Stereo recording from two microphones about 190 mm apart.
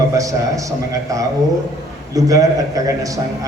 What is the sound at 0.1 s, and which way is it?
Speech, 15° right (ahead or behind).